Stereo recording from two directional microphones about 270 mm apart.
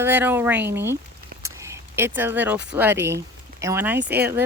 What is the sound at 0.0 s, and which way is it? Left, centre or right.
Speech, centre.